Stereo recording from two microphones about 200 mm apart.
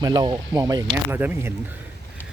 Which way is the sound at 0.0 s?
20° right (ahead or behind).